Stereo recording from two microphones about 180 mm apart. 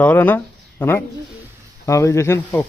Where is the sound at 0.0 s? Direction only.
10° left (ahead or behind).